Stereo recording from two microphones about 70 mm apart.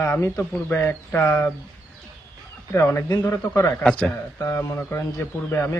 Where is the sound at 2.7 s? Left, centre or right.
Left.